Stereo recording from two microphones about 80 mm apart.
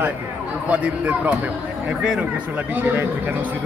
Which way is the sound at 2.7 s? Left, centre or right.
Right.